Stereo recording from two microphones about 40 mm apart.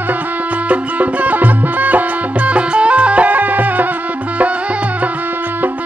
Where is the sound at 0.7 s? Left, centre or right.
Right.